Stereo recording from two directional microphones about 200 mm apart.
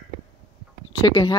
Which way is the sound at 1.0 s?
20° left (ahead or behind).